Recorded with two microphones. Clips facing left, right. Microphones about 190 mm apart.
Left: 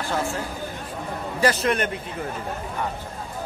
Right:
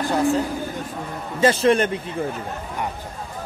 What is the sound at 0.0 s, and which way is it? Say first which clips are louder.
Speech: right 7 dB; 15° right (ahead or behind).